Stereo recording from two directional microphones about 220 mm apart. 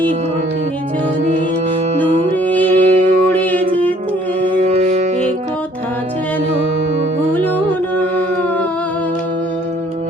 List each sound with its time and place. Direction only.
2.3 s music: 5° left (ahead or behind)
2.7 s music: 30° right (ahead or behind)
3.3 s music: 5° left (ahead or behind)
4.4 s music: 30° right (ahead or behind)